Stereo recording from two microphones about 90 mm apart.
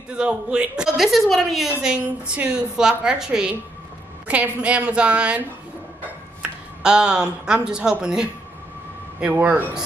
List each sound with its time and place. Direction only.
0.1 s a woman's voice: 10° right (ahead or behind)
4.6 s a woman's voice: 10° right (ahead or behind)
6.8 s a woman's voice: 10° right (ahead or behind)